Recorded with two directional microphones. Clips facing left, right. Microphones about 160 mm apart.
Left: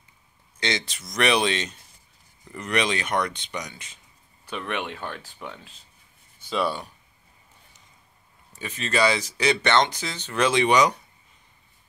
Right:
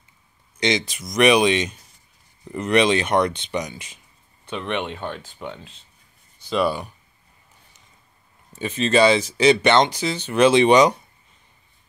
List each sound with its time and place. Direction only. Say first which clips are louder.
0.6 s speech: right 6 dB; 15° right (ahead or behind)
4.5 s speech: right 4 dB; centre (ahead or behind)
5.4 s speech: right 5 dB; 10° right (ahead or behind)
8.5 s speech: right 7 dB; 25° right (ahead or behind)